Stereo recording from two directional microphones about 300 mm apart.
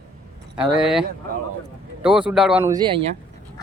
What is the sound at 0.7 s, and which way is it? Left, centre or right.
Speech, centre.